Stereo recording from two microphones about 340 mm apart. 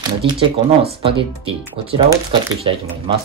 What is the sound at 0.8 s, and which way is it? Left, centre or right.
Speech, centre.